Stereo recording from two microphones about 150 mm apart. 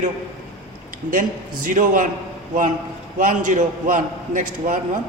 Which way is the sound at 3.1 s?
60° right (ahead or behind).